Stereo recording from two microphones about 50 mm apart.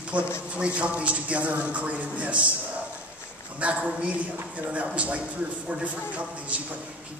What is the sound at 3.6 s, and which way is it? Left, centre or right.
A man's voice, right.